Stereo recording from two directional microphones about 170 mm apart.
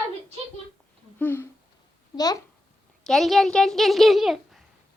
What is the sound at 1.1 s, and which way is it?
Speech, 10° left (ahead or behind).